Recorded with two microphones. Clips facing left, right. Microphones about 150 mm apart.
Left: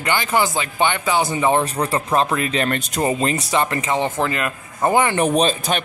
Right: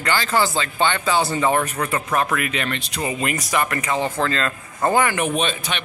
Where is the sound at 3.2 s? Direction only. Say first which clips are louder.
Left 3 dB; 30° left (ahead or behind).